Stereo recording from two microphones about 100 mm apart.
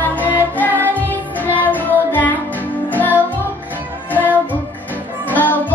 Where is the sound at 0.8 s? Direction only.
20° right (ahead or behind).